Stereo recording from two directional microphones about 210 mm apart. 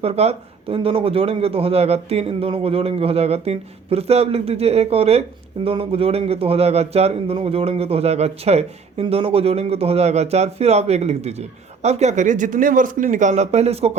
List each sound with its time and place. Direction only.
0.0 s a man's voice: 30° right (ahead or behind)